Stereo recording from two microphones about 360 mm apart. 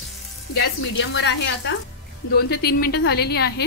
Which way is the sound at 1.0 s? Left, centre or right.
Left.